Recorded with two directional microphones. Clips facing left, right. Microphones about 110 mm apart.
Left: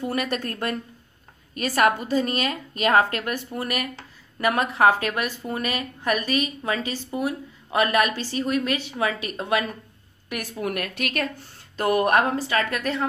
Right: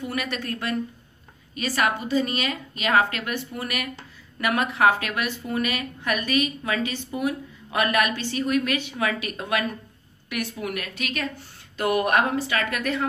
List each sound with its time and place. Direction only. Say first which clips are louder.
0.0 s a woman's voice: left 3 dB; 40° left (ahead or behind)
10.3 s a woman's voice: left 1 dB; 40° left (ahead or behind)
11.7 s a woman's voice: left 2 dB; 35° left (ahead or behind)